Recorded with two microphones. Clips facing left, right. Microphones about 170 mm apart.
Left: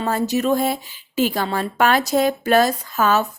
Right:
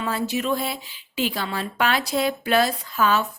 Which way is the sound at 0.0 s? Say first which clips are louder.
Left 5 dB; 40° left (ahead or behind).